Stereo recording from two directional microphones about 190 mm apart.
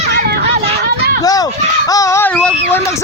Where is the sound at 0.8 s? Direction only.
55° right (ahead or behind).